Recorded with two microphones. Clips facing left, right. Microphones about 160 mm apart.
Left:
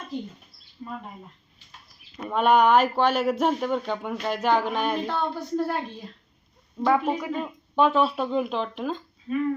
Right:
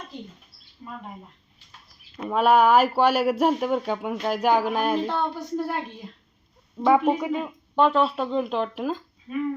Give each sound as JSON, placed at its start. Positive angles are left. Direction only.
{"t": 2.1, "sound": "speech", "side_deg": -5}
{"t": 5.0, "sound": "speech", "side_deg": -15}
{"t": 7.8, "sound": "speech", "side_deg": 5}